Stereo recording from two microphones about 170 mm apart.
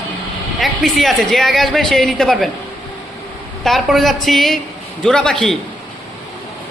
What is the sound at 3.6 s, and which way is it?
Speech, centre (ahead or behind).